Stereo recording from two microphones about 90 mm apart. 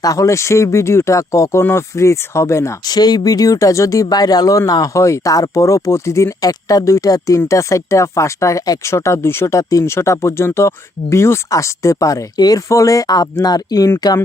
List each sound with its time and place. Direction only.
0.0 s speech: 40° left (ahead or behind)
2.8 s speech: 45° left (ahead or behind)
6.5 s speech: 40° left (ahead or behind)